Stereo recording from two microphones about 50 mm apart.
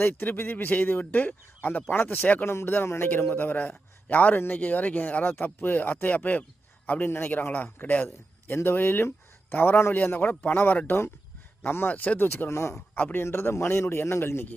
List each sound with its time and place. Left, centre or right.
0.2 s speech: left
2.6 s a man's voice: left
8.0 s speech: left
11.7 s speech: left
11.9 s speech: left
12.3 s speech: left
12.9 s a man's voice: left
13.1 s speech: left